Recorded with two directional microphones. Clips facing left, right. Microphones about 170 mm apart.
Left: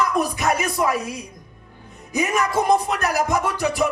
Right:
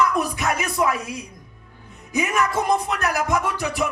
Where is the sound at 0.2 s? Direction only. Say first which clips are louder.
Left 2 dB; 40° left (ahead or behind).